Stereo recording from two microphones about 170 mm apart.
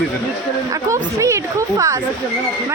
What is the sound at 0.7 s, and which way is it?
A woman's voice, 20° right (ahead or behind).